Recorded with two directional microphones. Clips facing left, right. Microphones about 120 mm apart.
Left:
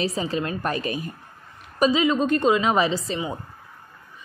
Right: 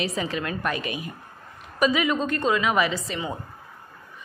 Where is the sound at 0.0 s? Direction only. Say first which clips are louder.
Left 2 dB; 35° left (ahead or behind).